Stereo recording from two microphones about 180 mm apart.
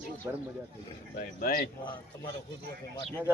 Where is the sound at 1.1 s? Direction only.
55° left (ahead or behind).